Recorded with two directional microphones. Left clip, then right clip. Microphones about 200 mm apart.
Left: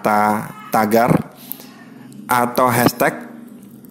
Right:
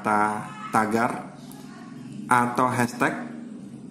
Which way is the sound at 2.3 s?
45° left (ahead or behind).